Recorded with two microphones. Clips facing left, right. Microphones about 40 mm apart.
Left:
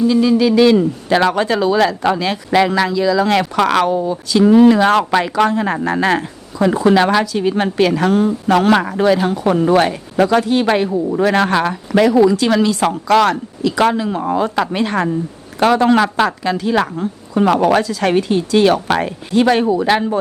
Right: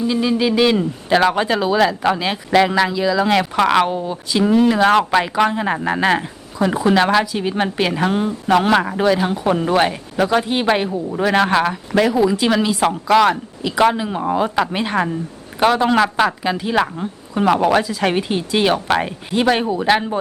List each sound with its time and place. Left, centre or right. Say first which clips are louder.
0.0 s speech: left 5 dB; centre
4.4 s a man's voice: left 4 dB; centre
8.7 s a man's voice: left 2 dB; centre
10.8 s a man's voice: left 5 dB; centre
11.2 s a man's voice: even; centre
16.4 s speech: left 2 dB; centre